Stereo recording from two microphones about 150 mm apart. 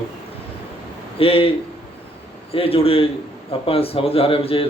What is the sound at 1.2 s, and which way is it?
Speech, 40° left (ahead or behind).